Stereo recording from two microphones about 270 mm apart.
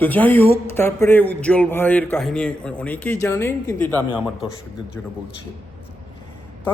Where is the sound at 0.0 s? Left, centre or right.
Centre.